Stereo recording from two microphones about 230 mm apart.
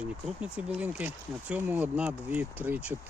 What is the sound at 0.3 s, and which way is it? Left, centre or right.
Speech, centre.